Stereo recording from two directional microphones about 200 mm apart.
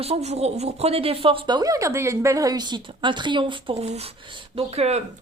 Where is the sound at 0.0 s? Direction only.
30° right (ahead or behind).